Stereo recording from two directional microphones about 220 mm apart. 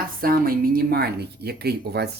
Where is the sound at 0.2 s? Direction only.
40° right (ahead or behind).